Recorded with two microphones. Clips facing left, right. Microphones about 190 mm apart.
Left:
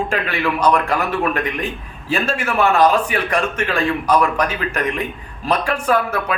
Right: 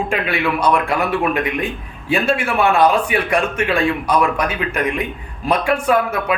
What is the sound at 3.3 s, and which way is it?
Speech, 35° left (ahead or behind).